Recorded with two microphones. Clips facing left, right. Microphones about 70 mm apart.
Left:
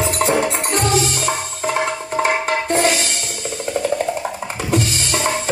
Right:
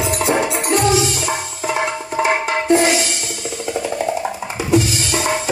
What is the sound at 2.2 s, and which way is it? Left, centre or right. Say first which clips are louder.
Music: right 1 dB; left.